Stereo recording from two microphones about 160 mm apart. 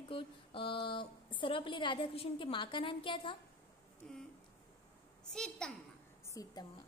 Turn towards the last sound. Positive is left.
turn(degrees=25)  # may be behind; listen again after turning